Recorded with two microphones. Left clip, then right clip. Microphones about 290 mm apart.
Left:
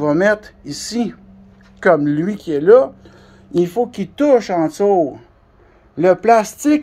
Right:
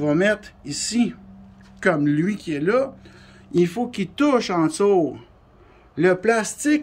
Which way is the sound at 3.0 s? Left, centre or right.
Centre.